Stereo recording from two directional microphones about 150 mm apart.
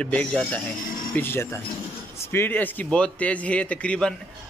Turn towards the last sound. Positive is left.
turn(degrees=10)  # may be behind; listen again after turning